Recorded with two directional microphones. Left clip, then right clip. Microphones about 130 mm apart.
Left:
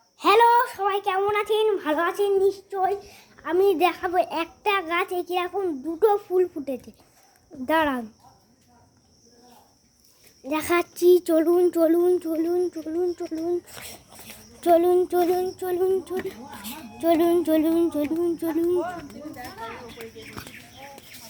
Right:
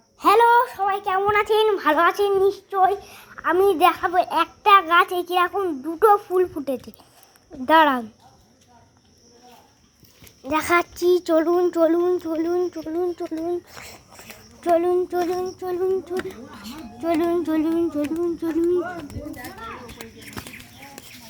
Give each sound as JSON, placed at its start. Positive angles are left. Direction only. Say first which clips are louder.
{"t": 0.2, "sound": "a woman's voice", "louder": "right 2 dB", "side_deg": 10}
{"t": 3.4, "sound": "a child's voice", "louder": "right 3 dB", "side_deg": 15}
{"t": 4.0, "sound": "child singing", "louder": "right 3 dB", "side_deg": 30}
{"t": 4.4, "sound": "a child's voice", "louder": "right 9 dB", "side_deg": 15}
{"t": 6.6, "sound": "speech", "louder": "right 4 dB", "side_deg": 0}
{"t": 7.6, "sound": "a child's voice", "louder": "right 7 dB", "side_deg": 10}
{"t": 10.4, "sound": "speech", "louder": "right 4 dB", "side_deg": 20}
{"t": 12.3, "sound": "a child's voice", "louder": "right 1 dB", "side_deg": 15}
{"t": 13.5, "sound": "a sound", "louder": "even", "side_deg": 20}
{"t": 14.7, "sound": "child singing", "louder": "left 1 dB", "side_deg": 40}
{"t": 16.2, "sound": "speech", "louder": "even", "side_deg": 40}